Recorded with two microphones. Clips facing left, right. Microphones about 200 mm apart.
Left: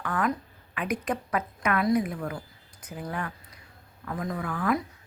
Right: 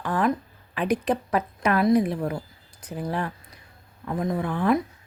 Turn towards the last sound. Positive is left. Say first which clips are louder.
# right 5 dB
turn(degrees=-25)  # may be behind; listen again after turning